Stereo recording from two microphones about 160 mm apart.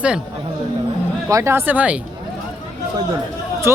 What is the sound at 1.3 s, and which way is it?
Speech, 20° right (ahead or behind).